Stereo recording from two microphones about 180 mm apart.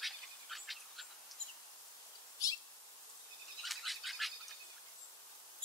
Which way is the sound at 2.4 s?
20° left (ahead or behind).